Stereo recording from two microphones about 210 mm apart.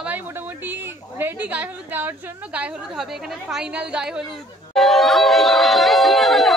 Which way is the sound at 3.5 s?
5° right (ahead or behind).